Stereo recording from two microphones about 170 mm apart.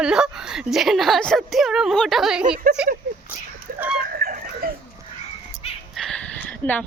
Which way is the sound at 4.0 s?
60° right (ahead or behind).